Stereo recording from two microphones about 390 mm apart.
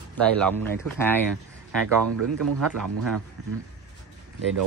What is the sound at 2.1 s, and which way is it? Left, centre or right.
Speech, right.